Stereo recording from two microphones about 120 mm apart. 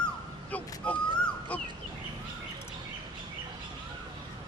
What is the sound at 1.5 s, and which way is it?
Fowl, 10° left (ahead or behind).